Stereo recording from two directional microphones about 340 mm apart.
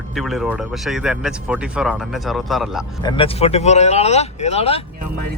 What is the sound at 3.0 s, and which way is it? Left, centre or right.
Speech, centre.